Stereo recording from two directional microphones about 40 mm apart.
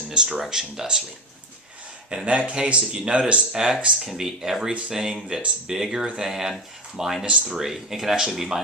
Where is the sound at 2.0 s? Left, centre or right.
Right.